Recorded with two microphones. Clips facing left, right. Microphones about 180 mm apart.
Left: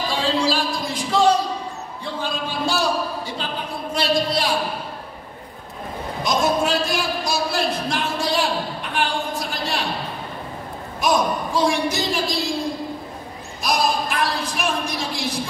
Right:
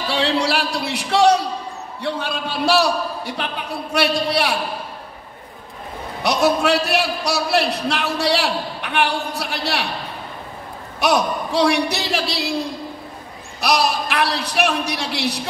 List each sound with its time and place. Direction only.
0.1 s a sound: 70° right (ahead or behind)
2.0 s a man's voice: 70° right (ahead or behind)
6.2 s a man's voice: 70° right (ahead or behind)
11.0 s a man's voice: 70° right (ahead or behind)
13.6 s a man's voice: 70° right (ahead or behind)